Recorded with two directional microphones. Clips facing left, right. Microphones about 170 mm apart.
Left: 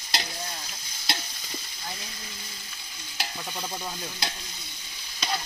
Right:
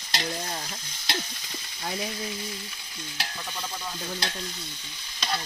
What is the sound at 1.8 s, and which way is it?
Frying, 65° right (ahead or behind).